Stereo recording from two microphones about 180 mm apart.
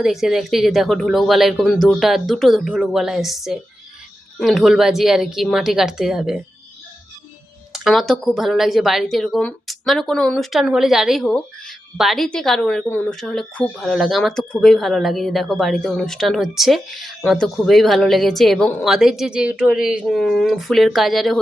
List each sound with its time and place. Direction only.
0.0 s speech: centre (ahead or behind)
7.7 s speech: centre (ahead or behind)